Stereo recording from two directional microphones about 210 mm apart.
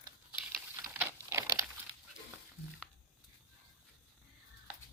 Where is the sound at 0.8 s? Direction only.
15° right (ahead or behind).